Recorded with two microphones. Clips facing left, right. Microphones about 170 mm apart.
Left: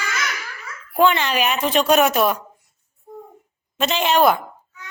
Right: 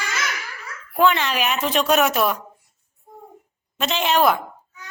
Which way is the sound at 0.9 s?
Centre (ahead or behind).